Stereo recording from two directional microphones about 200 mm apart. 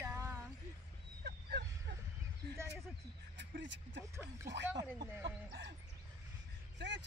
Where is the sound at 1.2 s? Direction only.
50° right (ahead or behind).